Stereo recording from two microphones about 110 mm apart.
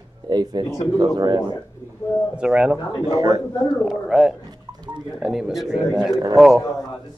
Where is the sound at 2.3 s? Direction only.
10° right (ahead or behind).